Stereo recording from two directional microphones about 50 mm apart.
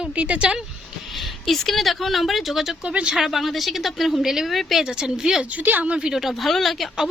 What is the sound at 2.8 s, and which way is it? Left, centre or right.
Speech, right.